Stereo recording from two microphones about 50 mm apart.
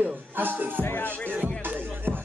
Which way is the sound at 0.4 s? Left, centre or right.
Right.